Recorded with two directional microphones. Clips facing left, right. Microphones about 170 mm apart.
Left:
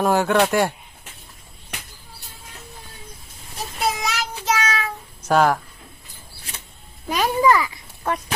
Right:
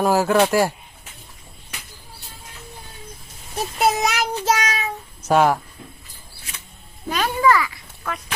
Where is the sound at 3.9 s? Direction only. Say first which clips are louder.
Right 5 dB; 55° right (ahead or behind).